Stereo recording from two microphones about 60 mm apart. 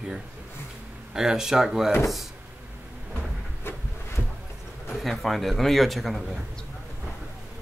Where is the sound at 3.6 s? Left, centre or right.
Left.